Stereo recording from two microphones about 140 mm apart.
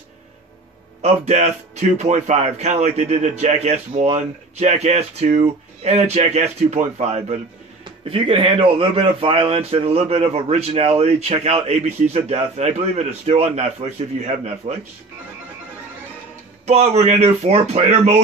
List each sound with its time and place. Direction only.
1.0 s speech: 50° right (ahead or behind)
7.8 s speech: 40° right (ahead or behind)
16.6 s speech: 50° right (ahead or behind)